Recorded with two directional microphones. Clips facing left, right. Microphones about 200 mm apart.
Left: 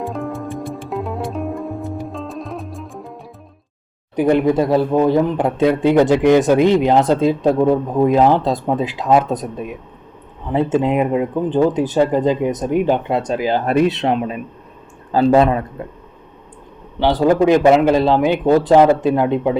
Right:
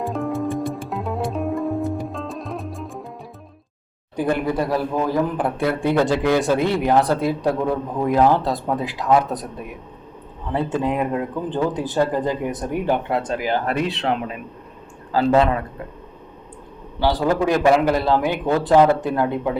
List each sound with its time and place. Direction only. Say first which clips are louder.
0.0 s music: right 1 dB; centre (ahead or behind)
4.1 s speech: left 7 dB; 20° left (ahead or behind)
17.0 s speech: left 5 dB; 20° left (ahead or behind)